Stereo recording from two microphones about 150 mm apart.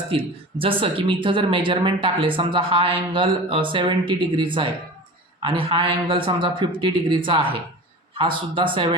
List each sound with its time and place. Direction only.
0.1 s speech: 35° right (ahead or behind)